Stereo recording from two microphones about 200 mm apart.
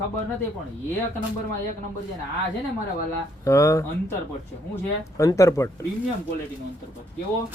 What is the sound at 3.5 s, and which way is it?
Speech, 15° left (ahead or behind).